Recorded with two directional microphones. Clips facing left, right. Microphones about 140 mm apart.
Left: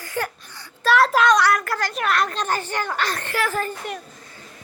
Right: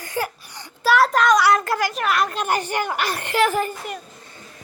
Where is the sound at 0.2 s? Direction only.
15° right (ahead or behind).